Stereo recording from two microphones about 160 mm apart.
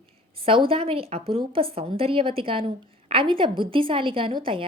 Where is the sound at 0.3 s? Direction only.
35° right (ahead or behind).